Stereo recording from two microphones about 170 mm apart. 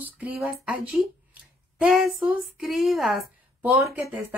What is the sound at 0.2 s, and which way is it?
Speech, 10° right (ahead or behind).